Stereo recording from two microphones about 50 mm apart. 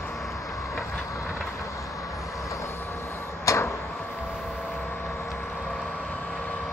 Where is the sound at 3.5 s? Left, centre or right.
Left.